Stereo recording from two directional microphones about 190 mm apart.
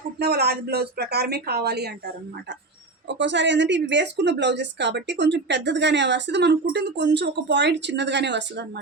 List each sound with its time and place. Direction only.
0.2 s speech: 55° right (ahead or behind)
3.1 s speech: 70° right (ahead or behind)